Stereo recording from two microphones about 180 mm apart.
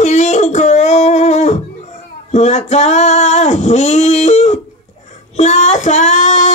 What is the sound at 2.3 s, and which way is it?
Singing, 40° left (ahead or behind).